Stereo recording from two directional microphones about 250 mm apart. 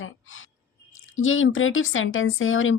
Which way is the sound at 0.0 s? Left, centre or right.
Left.